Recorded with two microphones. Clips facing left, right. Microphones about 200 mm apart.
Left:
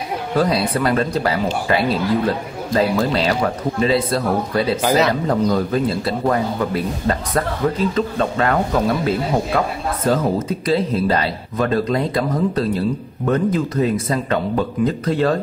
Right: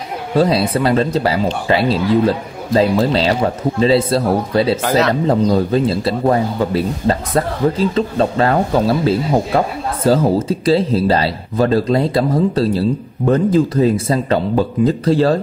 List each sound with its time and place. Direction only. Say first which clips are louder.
0.3 s speech: right 4 dB; 25° right (ahead or behind)
4.8 s speech: right 1 dB; centre (ahead or behind)
5.2 s speech: right 4 dB; 25° right (ahead or behind)